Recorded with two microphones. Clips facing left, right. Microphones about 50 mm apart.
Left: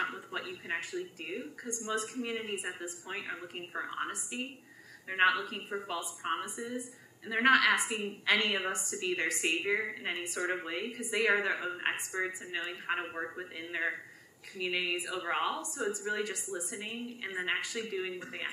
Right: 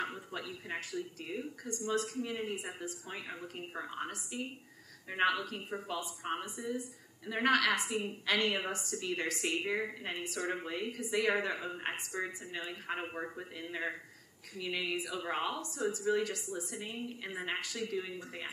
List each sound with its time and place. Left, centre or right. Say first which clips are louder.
0.1 s a sound: left 3 dB; left
0.7 s a woman's voice: left 2 dB; left
5.2 s a woman's voice: left 3 dB; centre
9.7 s a woman's voice: left 3 dB; centre
13.6 s a woman's voice: left 4 dB; left
18.2 s speech: left 4 dB; left